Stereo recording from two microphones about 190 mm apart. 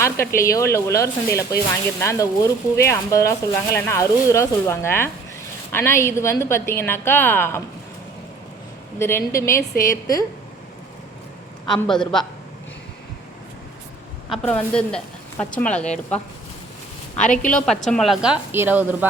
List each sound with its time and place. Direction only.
0.0 s speech: 15° left (ahead or behind)
9.0 s a woman's voice: 15° left (ahead or behind)
11.7 s speech: centre (ahead or behind)
14.3 s speech: 5° left (ahead or behind)
17.8 s a woman's voice: centre (ahead or behind)